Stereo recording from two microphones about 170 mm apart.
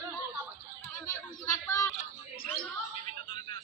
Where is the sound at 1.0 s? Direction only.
20° left (ahead or behind).